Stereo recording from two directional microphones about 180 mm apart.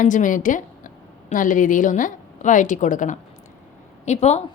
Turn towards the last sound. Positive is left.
turn(degrees=40)  # may be behind; listen again after turning